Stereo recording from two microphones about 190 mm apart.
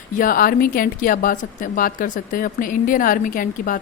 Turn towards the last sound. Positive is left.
turn(degrees=45)  # may be behind; listen again after turning